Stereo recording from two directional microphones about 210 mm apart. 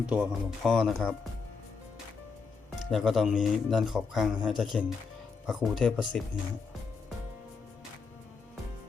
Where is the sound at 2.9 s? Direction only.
Centre (ahead or behind).